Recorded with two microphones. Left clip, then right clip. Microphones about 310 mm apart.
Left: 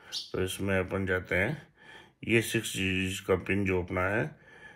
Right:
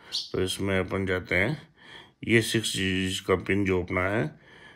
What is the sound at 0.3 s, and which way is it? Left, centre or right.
Speech, right.